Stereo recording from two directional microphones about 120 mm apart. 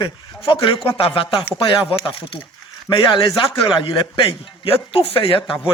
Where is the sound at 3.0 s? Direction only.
40° left (ahead or behind).